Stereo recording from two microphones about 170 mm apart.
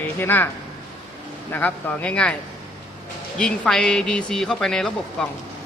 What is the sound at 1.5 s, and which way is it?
Speech, 10° left (ahead or behind).